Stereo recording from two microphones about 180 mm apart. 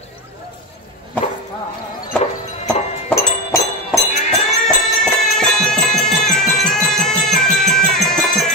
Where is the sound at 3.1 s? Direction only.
15° left (ahead or behind).